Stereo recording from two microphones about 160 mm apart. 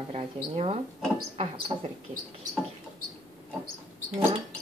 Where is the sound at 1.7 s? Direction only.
30° right (ahead or behind).